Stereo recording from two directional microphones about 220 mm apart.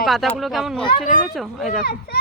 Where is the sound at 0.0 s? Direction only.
Centre (ahead or behind).